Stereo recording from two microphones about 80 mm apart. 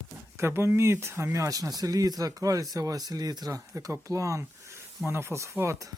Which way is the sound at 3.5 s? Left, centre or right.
Right.